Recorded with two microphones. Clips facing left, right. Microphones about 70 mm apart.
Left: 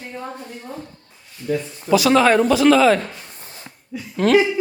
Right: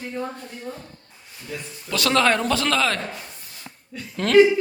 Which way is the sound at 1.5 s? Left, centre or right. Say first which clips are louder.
Left 12 dB; left.